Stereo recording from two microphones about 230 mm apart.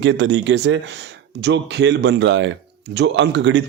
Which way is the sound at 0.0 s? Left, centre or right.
Right.